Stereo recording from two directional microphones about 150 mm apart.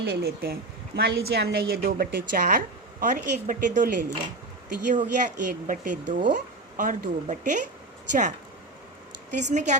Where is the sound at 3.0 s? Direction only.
60° right (ahead or behind).